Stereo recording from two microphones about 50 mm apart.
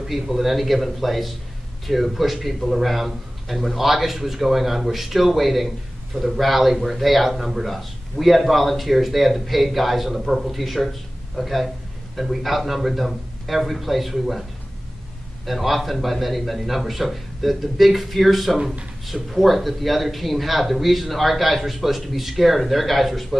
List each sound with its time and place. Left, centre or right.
0.0 s speech: centre
15.4 s speech: centre